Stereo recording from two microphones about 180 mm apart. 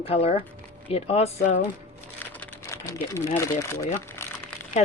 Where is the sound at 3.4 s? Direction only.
15° left (ahead or behind).